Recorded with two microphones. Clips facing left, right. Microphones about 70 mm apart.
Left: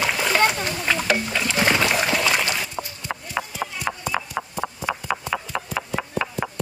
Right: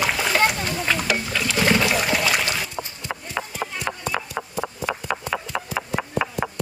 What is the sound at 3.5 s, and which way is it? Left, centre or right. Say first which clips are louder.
Clip-clop: even; right.